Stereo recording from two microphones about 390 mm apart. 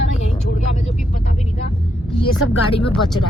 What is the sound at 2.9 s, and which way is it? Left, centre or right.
Speech, centre.